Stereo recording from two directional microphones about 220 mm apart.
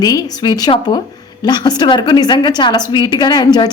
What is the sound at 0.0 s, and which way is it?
A woman's voice, 15° left (ahead or behind).